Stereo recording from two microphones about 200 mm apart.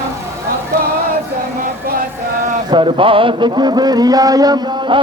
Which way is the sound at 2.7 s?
25° right (ahead or behind).